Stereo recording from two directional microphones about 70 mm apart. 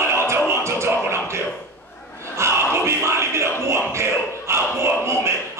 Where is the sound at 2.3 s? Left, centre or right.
Right.